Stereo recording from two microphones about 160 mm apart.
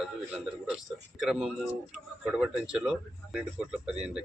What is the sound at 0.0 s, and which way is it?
Speech, centre (ahead or behind).